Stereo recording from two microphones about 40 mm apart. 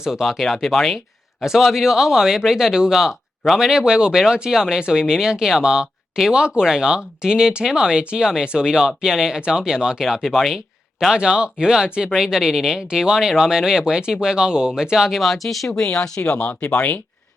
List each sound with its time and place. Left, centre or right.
0.0 s speech: centre
10.2 s speech: centre
11.1 s speech: right
15.3 s speech: centre
15.7 s speech: left
16.5 s speech: left